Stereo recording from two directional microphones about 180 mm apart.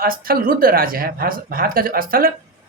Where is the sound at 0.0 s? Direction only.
55° right (ahead or behind).